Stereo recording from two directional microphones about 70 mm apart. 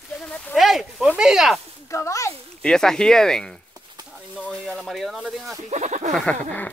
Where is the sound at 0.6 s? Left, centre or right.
Centre.